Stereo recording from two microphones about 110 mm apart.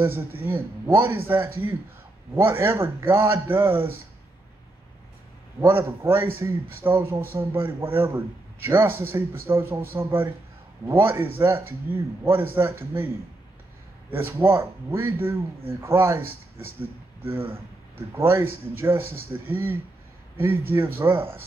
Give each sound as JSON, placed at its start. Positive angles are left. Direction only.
{"t": 0.0, "sound": "a man's voice", "side_deg": -20}
{"t": 5.6, "sound": "a man's voice", "side_deg": -25}
{"t": 14.1, "sound": "a man's voice", "side_deg": -20}